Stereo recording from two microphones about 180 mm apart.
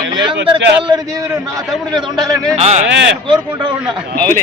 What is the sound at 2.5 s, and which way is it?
Speech, 35° right (ahead or behind).